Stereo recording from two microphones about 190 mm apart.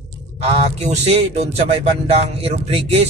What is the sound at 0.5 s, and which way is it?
Speech, 35° right (ahead or behind).